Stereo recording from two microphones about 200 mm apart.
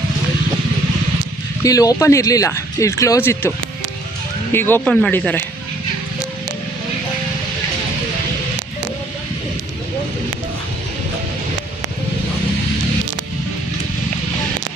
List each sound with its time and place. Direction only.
1.6 s speech: 15° left (ahead or behind)
4.5 s speech: 10° left (ahead or behind)